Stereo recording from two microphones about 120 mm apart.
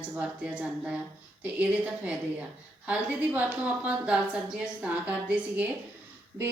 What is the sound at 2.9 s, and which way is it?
A woman's voice, 10° right (ahead or behind).